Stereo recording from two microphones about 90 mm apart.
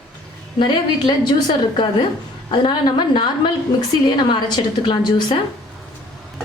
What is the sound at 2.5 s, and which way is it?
A woman's voice, 60° left (ahead or behind).